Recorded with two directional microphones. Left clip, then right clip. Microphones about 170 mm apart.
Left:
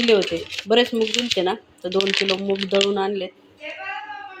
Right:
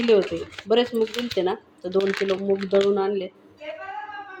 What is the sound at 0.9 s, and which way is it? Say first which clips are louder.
Speech: left 4 dB; 35° right (ahead or behind).